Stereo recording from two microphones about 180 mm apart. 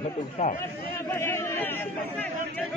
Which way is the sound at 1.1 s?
15° left (ahead or behind).